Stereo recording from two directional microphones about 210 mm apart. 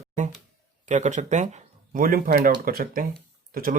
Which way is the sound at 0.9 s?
35° right (ahead or behind).